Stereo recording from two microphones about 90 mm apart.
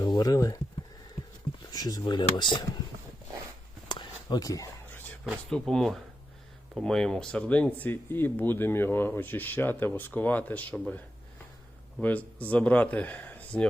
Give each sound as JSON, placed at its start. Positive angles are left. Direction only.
{"t": 0.0, "sound": "speech", "side_deg": 50}
{"t": 1.7, "sound": "speech", "side_deg": 45}
{"t": 3.8, "sound": "a sound", "side_deg": 50}
{"t": 5.5, "sound": "speech", "side_deg": 5}
{"t": 12.0, "sound": "speech", "side_deg": 15}